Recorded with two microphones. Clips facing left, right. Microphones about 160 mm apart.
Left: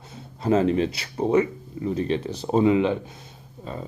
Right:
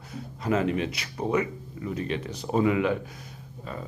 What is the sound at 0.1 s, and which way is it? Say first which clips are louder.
Speech: left 5 dB; 30° left (ahead or behind).